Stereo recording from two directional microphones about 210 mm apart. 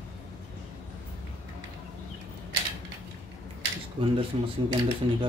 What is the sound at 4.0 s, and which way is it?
Speech, 25° right (ahead or behind).